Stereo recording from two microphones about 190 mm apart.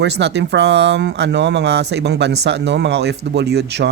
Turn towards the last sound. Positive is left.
turn(degrees=-60)  # may be behind; listen again after turning